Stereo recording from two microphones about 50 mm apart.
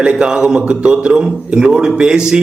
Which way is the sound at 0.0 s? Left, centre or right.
Centre.